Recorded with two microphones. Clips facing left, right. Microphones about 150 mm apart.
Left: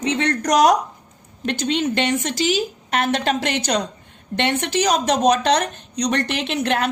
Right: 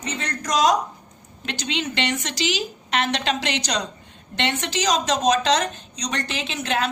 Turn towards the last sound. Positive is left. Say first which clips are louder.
# left 4 dB
turn(degrees=60)  # may be behind; listen again after turning